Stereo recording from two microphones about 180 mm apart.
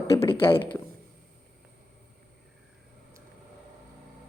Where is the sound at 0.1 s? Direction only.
30° left (ahead or behind).